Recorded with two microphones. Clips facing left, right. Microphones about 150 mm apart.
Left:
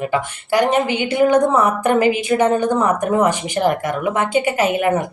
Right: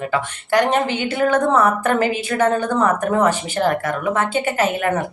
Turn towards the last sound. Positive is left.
turn(degrees=10)  # may be behind; listen again after turning